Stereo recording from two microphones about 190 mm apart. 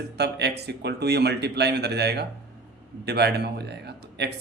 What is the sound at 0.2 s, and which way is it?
Speech, 60° right (ahead or behind).